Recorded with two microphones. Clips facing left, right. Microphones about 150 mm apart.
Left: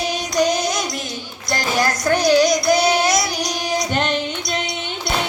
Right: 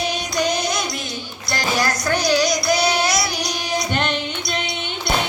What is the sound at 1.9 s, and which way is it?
Child singing, 50° left (ahead or behind).